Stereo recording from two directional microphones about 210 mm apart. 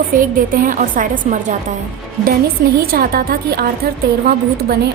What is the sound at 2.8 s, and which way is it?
A woman's voice, 45° right (ahead or behind).